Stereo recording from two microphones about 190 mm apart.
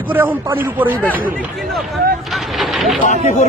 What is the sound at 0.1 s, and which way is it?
Speech, 10° right (ahead or behind).